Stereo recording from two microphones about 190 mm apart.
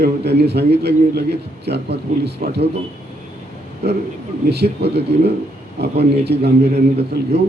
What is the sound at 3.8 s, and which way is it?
A man's voice, 55° right (ahead or behind).